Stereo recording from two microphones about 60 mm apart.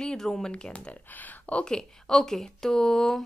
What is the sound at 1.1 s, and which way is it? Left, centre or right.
Speech, left.